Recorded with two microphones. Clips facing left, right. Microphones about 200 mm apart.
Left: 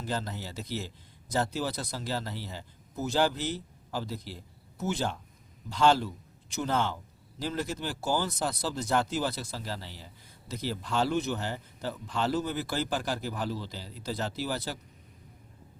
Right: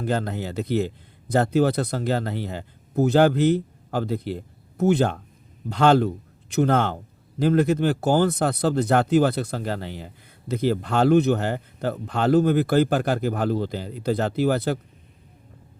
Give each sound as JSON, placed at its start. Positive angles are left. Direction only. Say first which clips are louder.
{"t": 0.0, "sound": "speech", "louder": "right 9 dB", "side_deg": -60}